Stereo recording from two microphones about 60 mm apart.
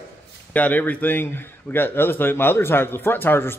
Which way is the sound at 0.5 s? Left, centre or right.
Left.